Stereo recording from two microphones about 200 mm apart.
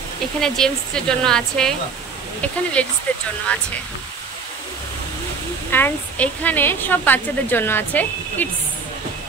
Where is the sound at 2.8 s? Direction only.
5° left (ahead or behind).